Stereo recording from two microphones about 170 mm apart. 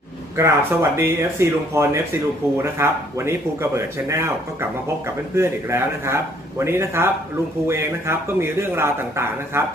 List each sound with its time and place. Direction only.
0.3 s speech: 15° right (ahead or behind)
5.3 s speech: 15° right (ahead or behind)